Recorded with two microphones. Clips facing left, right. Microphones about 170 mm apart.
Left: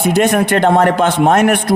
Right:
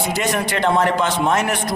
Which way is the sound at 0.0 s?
55° left (ahead or behind).